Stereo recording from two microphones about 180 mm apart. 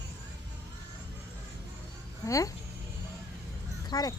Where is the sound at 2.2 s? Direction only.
20° left (ahead or behind).